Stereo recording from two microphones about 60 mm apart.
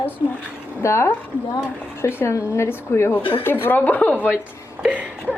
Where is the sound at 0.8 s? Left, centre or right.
Left.